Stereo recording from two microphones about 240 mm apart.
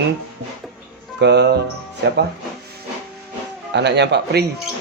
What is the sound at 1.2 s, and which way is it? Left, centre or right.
Speech, right.